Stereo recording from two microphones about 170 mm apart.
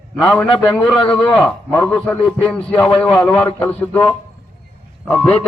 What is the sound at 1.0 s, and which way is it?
Speech, 30° left (ahead or behind).